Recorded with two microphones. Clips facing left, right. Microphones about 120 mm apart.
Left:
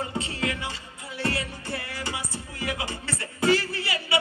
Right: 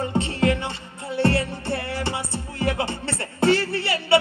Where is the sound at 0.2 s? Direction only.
30° right (ahead or behind).